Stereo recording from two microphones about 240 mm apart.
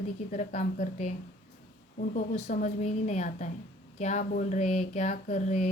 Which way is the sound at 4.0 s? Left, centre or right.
Left.